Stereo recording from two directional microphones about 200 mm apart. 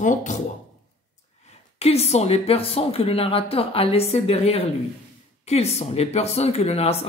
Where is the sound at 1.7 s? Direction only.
30° left (ahead or behind).